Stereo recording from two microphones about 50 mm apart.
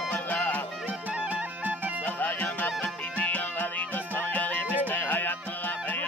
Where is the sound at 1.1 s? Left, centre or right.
Right.